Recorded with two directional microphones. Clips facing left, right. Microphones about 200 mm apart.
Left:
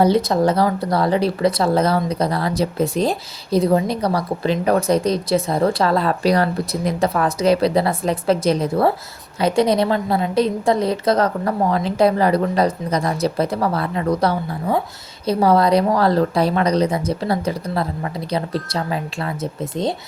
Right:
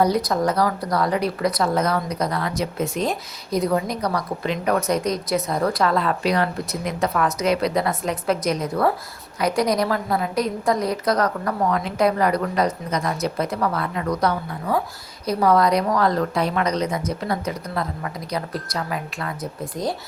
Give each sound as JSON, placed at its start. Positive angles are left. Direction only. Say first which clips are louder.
{"t": 0.0, "sound": "a woman's voice", "louder": "left 4 dB", "side_deg": 25}